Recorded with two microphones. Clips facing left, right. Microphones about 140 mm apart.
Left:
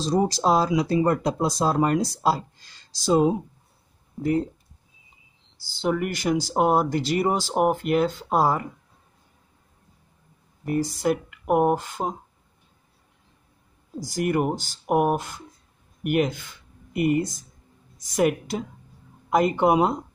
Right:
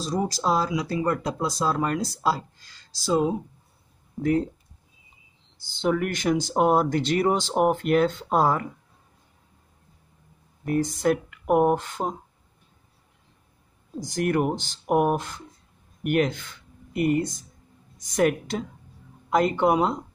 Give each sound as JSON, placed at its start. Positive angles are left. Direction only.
{"t": 0.2, "sound": "speech", "side_deg": 25}
{"t": 4.2, "sound": "speech", "side_deg": 5}
{"t": 5.6, "sound": "speech", "side_deg": 5}
{"t": 10.6, "sound": "speech", "side_deg": 5}
{"t": 13.9, "sound": "speech", "side_deg": 5}